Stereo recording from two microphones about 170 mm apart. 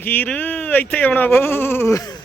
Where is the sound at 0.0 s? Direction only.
10° left (ahead or behind).